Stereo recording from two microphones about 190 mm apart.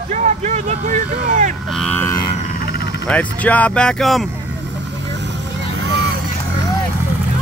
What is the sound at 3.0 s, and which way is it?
Speech, 10° left (ahead or behind).